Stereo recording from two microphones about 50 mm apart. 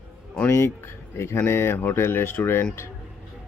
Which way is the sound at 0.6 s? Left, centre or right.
Left.